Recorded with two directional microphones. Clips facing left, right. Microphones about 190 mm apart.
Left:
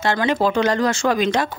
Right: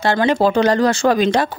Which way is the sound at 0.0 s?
35° right (ahead or behind).